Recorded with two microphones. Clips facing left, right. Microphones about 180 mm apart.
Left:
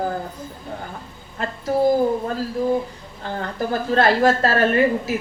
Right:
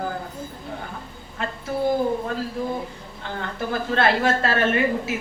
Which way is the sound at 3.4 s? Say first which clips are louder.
Left 3 dB; 40° left (ahead or behind).